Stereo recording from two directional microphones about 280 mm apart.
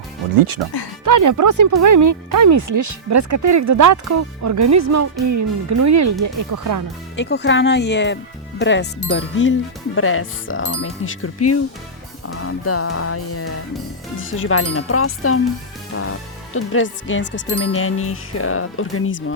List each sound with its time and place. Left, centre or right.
1.0 s speech: right
7.2 s speech: left
15.9 s music: left
16.6 s speech: left